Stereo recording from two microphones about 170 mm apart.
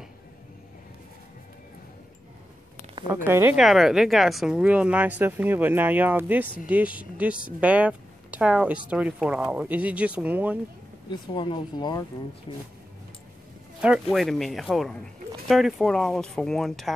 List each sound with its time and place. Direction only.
3.3 s speech: 15° right (ahead or behind)
3.5 s speech: centre (ahead or behind)
11.1 s speech: 25° left (ahead or behind)
13.7 s speech: 5° right (ahead or behind)